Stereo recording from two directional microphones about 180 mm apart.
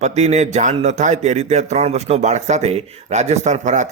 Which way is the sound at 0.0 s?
40° right (ahead or behind).